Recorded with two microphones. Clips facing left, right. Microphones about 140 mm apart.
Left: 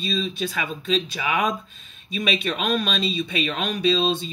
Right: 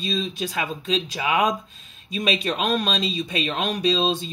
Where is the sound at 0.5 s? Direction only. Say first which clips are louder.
Even; 35° right (ahead or behind).